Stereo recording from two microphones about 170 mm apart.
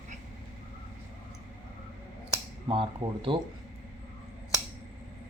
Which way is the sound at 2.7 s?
30° right (ahead or behind).